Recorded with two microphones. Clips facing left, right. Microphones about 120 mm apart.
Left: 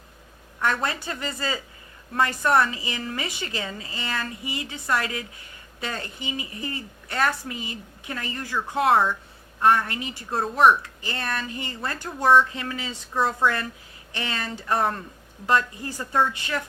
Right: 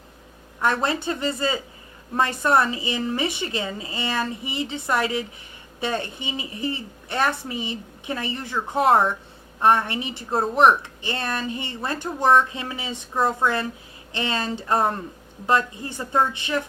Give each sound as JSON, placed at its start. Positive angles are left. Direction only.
{"t": 0.6, "sound": "a woman's voice", "side_deg": -25}